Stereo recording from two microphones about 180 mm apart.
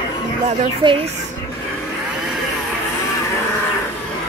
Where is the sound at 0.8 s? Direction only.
25° right (ahead or behind).